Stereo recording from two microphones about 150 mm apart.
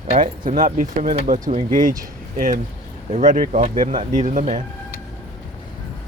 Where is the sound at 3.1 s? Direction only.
55° right (ahead or behind).